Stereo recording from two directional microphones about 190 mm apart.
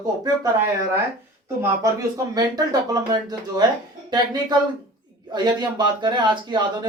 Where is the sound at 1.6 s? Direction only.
15° right (ahead or behind).